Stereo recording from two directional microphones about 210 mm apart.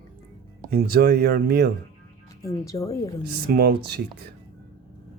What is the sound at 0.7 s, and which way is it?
Speech, 45° right (ahead or behind).